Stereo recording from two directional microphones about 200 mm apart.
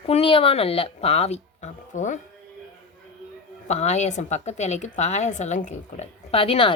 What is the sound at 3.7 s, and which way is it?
Speech, 35° left (ahead or behind).